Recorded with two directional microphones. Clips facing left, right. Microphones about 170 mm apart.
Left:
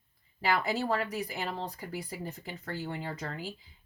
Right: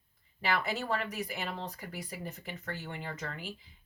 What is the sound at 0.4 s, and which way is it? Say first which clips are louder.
Speech: left 3 dB; 35° left (ahead or behind).